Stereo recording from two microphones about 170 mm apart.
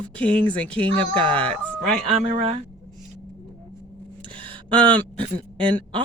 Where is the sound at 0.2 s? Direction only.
5° left (ahead or behind).